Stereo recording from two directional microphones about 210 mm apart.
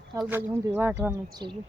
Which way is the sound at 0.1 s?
10° right (ahead or behind).